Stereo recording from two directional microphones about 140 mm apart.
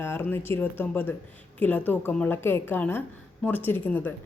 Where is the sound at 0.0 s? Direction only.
15° left (ahead or behind).